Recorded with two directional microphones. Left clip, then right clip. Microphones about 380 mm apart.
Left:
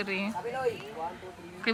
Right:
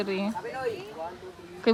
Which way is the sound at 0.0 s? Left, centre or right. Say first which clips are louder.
Right 2 dB; centre.